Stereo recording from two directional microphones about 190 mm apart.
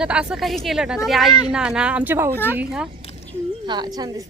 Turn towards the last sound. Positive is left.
turn(degrees=-25)  # may be behind; listen again after turning